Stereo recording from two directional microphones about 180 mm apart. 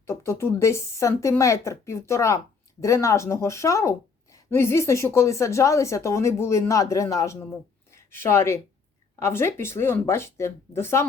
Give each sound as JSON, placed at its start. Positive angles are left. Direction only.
{"t": 0.1, "sound": "speech", "side_deg": 15}